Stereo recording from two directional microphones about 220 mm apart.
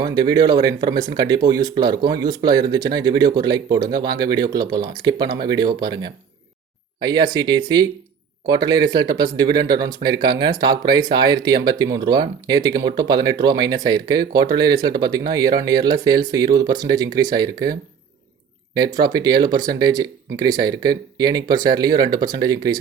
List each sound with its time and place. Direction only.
0.0 s speech: 15° right (ahead or behind)
18.9 s speech: 20° right (ahead or behind)